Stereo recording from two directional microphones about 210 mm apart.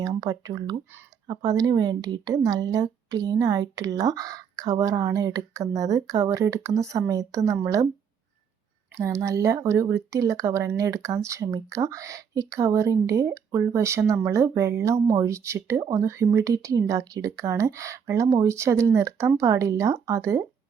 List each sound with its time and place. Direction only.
0.0 s speech: 20° right (ahead or behind)
9.0 s speech: 15° right (ahead or behind)